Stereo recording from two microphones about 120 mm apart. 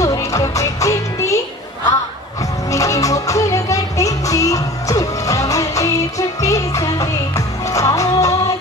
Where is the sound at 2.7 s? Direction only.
25° left (ahead or behind).